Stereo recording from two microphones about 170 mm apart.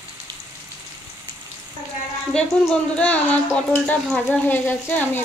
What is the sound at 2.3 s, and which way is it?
Speech, 5° left (ahead or behind).